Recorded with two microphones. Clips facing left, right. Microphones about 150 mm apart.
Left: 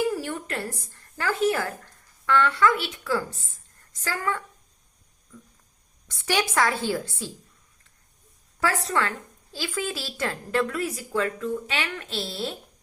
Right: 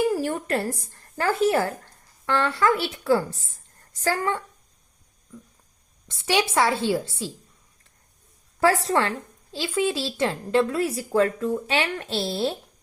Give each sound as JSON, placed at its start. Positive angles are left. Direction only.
{"t": 0.1, "sound": "a sound", "side_deg": -35}
{"t": 1.2, "sound": "speech", "side_deg": -35}
{"t": 6.1, "sound": "a woman's voice", "side_deg": -20}
{"t": 8.9, "sound": "a woman's voice", "side_deg": -30}